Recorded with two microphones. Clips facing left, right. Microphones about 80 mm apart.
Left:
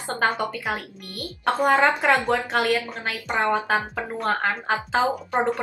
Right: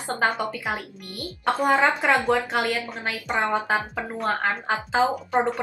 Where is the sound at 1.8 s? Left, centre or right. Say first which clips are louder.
Left 1 dB; centre.